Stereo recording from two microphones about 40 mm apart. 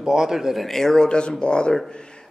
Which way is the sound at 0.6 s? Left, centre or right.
Centre.